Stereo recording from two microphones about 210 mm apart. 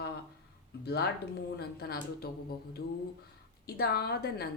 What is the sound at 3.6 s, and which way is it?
Speech, 50° left (ahead or behind).